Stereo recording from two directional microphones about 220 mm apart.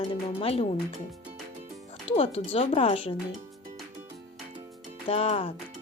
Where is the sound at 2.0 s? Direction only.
25° left (ahead or behind).